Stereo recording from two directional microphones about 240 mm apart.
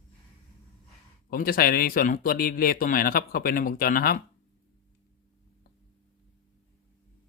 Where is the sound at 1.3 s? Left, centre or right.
Left.